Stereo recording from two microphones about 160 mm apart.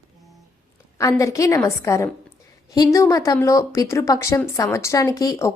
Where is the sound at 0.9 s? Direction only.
20° left (ahead or behind).